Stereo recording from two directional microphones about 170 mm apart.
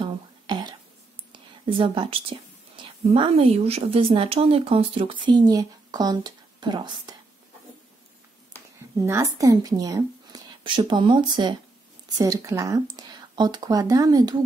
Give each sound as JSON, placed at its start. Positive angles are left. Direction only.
{"t": 0.0, "sound": "throat clearing", "side_deg": -25}
{"t": 1.3, "sound": "speech", "side_deg": -30}
{"t": 8.5, "sound": "speech", "side_deg": -15}